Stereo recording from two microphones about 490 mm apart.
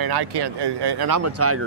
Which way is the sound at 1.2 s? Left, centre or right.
Right.